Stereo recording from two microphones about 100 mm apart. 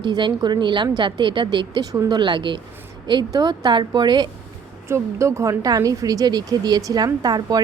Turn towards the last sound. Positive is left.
turn(degrees=-40)  # may be behind; listen again after turning